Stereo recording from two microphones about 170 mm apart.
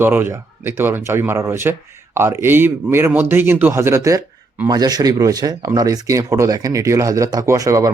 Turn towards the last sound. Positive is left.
turn(degrees=-20)  # may be behind; listen again after turning